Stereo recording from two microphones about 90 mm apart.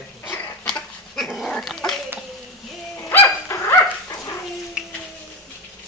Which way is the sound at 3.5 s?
35° left (ahead or behind).